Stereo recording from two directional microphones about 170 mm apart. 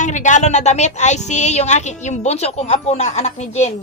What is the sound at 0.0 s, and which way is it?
Speech, 45° left (ahead or behind).